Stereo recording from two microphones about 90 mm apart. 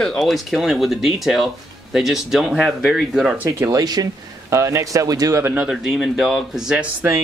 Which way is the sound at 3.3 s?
25° right (ahead or behind).